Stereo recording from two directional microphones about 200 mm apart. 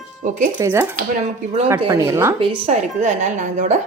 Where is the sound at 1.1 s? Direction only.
35° right (ahead or behind).